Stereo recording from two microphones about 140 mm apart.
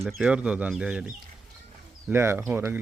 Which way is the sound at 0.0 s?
5° right (ahead or behind).